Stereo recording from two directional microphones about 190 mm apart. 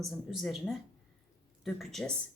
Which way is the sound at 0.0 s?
Centre (ahead or behind).